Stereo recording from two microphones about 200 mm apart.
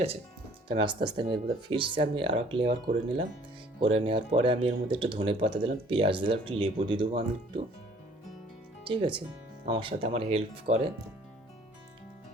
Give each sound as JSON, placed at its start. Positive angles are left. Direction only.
{"t": 0.7, "sound": "speech", "side_deg": -25}
{"t": 3.8, "sound": "speech", "side_deg": -25}
{"t": 8.8, "sound": "speech", "side_deg": -25}